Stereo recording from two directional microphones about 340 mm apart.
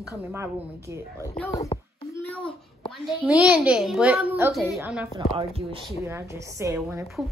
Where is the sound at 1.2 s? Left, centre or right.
Centre.